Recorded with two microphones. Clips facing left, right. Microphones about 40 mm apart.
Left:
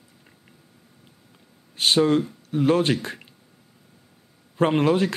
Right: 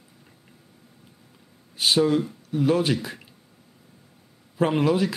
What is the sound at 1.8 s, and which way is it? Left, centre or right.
Speech, centre.